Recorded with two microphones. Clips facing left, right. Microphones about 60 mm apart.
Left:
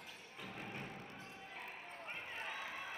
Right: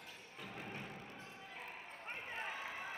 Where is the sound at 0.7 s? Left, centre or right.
Centre.